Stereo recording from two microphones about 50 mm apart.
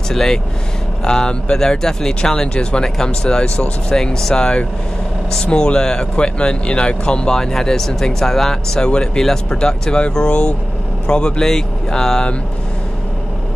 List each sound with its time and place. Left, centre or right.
0.1 s speech: centre